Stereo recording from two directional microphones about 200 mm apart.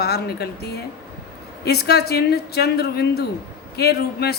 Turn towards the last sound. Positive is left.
turn(degrees=55)  # may be behind; listen again after turning